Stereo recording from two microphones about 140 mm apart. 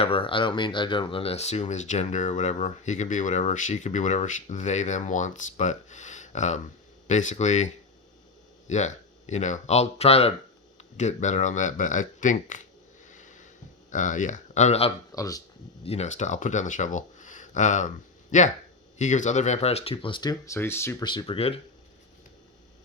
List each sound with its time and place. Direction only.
0.0 s speech: 40° left (ahead or behind)
10.9 s speech: 55° left (ahead or behind)
13.1 s a sound: 65° left (ahead or behind)
13.9 s speech: 65° left (ahead or behind); by 14.9 s 45° left (ahead or behind)
15.1 s speech: 25° left (ahead or behind)
15.8 s speech: 50° left (ahead or behind)
20.4 s speech: 20° left (ahead or behind)
21.0 s speech: 35° left (ahead or behind)